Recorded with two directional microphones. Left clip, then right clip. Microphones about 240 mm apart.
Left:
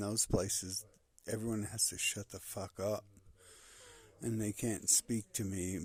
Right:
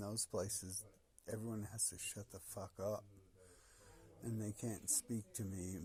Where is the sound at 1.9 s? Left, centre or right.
Left.